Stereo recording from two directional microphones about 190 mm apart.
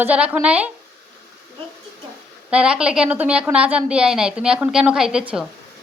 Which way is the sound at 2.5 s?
5° right (ahead or behind).